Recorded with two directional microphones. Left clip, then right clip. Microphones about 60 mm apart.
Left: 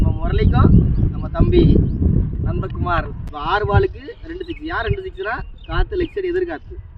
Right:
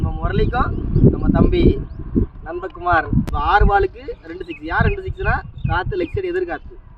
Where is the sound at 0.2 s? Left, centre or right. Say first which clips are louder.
Right 1 dB; centre.